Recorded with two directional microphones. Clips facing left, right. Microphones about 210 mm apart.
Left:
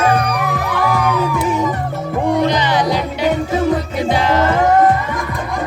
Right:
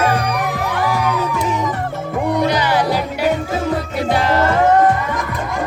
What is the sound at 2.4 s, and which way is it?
Music, 10° right (ahead or behind).